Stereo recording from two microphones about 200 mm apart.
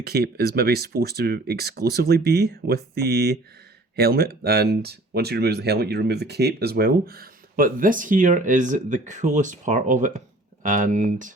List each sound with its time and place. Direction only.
0.0 s speech: 50° right (ahead or behind)